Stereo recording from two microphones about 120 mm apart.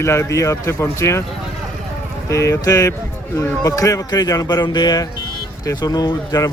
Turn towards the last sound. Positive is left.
turn(degrees=30)  # may be behind; listen again after turning